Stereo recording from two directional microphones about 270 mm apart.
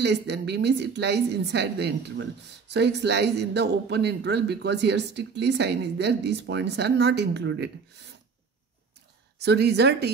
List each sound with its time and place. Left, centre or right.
0.0 s speech: right
9.4 s speech: right